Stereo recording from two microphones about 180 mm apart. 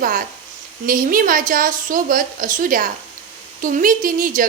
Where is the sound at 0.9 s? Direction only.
50° right (ahead or behind).